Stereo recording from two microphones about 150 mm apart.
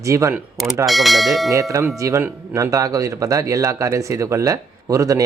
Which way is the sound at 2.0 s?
20° right (ahead or behind).